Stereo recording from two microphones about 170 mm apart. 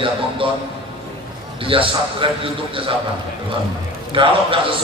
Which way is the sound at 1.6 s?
30° right (ahead or behind).